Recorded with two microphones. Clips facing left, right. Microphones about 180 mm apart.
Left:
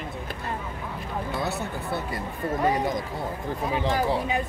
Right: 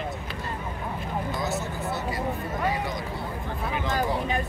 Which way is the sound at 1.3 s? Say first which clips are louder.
Even; 60° left (ahead or behind).